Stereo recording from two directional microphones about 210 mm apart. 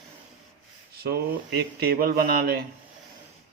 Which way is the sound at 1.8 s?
45° right (ahead or behind).